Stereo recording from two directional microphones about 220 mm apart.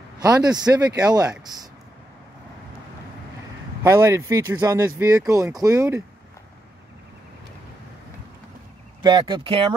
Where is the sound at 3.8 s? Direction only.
15° right (ahead or behind).